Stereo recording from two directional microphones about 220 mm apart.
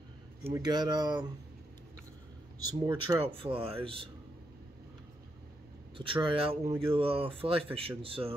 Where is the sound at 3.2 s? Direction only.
25° right (ahead or behind).